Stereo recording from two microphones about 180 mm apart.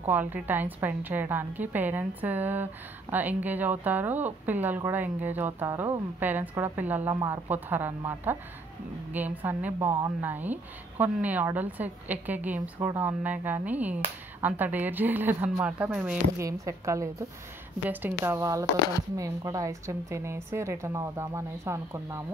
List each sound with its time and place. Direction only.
0.1 s a woman's voice: 10° right (ahead or behind)
16.3 s a woman's voice: 15° right (ahead or behind)